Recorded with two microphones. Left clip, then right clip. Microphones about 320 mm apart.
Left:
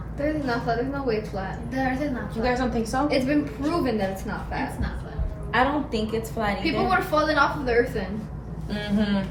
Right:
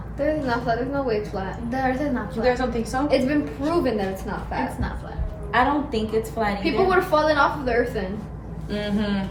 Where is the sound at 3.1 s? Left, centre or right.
Centre.